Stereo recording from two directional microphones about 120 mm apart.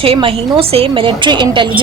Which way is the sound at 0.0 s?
50° right (ahead or behind).